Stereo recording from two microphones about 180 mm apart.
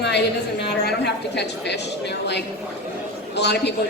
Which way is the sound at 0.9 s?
70° left (ahead or behind).